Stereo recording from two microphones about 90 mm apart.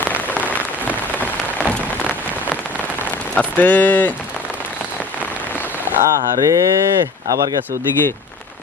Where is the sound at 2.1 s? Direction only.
20° left (ahead or behind).